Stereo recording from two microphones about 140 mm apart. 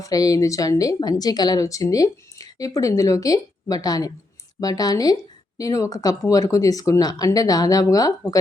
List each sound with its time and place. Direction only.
0.0 s a woman's voice: 25° left (ahead or behind)